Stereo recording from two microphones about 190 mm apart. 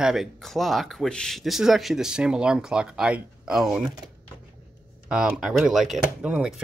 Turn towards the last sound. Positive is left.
turn(degrees=-5)  # may be behind; listen again after turning